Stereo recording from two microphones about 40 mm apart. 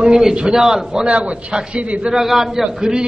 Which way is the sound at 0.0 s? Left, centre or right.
Centre.